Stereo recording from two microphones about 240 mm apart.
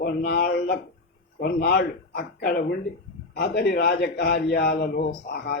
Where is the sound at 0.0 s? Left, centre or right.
Left.